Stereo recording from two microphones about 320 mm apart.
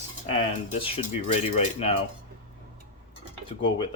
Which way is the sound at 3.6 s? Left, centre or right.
Centre.